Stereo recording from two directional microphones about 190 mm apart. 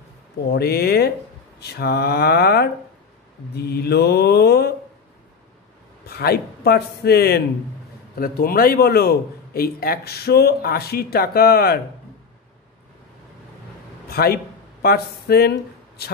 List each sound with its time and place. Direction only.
0.5 s mantra: 55° left (ahead or behind)
6.0 s a man's voice: 55° left (ahead or behind)
14.0 s speech: 55° left (ahead or behind)